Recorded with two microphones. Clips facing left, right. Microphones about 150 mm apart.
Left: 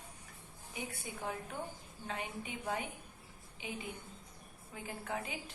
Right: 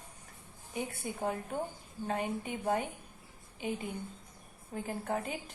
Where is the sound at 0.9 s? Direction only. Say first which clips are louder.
Right 5 dB; 45° right (ahead or behind).